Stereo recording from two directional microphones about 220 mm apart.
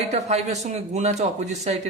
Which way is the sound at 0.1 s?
30° right (ahead or behind).